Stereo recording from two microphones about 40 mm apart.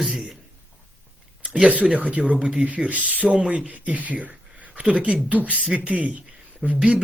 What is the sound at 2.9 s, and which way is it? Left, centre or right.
Speech, right.